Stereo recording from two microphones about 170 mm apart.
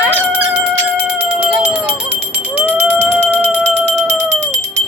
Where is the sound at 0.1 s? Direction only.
10° right (ahead or behind).